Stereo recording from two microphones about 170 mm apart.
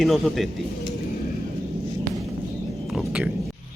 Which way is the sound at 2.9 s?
5° right (ahead or behind).